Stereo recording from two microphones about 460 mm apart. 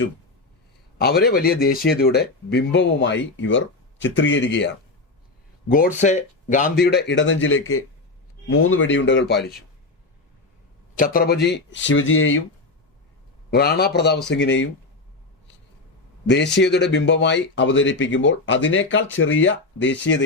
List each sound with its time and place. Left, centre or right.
0.9 s speech: centre
10.9 s speech: centre
13.5 s speech: centre
16.3 s speech: left